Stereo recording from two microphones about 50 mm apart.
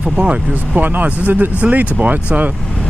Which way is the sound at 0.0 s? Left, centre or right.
Right.